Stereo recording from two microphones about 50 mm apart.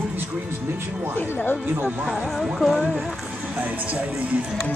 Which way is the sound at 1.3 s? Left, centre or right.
Left.